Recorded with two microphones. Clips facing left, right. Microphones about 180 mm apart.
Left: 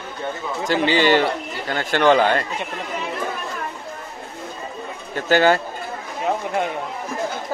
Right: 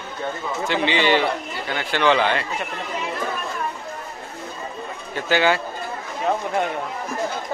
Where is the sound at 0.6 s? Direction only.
40° left (ahead or behind).